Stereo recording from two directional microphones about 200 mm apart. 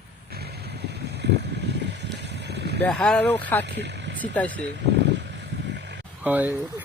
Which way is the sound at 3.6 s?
60° right (ahead or behind).